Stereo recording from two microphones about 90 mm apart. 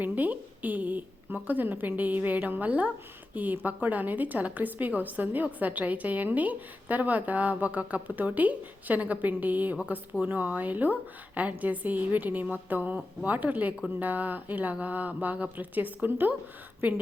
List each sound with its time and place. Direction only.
0.0 s a woman's voice: 20° right (ahead or behind)